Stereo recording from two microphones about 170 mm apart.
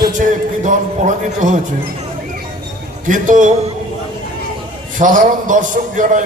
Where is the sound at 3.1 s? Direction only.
50° right (ahead or behind).